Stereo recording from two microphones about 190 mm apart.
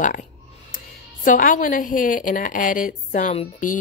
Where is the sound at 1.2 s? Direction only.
45° left (ahead or behind).